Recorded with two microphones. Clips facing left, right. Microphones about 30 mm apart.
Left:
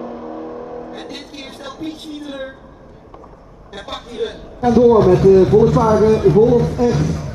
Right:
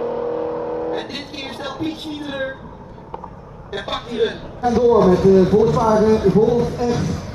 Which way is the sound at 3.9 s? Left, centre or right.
Right.